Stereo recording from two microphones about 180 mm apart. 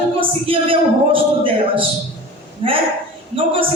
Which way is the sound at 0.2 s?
30° right (ahead or behind).